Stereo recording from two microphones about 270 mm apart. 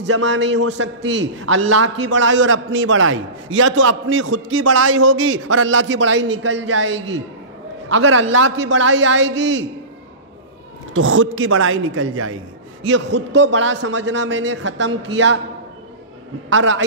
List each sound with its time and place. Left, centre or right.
0.2 s a man's voice: right
10.9 s a man's voice: right
16.4 s a man's voice: right